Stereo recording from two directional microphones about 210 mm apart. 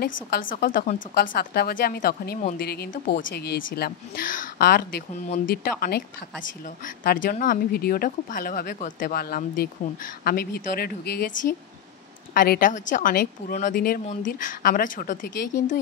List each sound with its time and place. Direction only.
0.4 s a woman's voice: 40° left (ahead or behind)
12.4 s a woman's voice: 40° left (ahead or behind)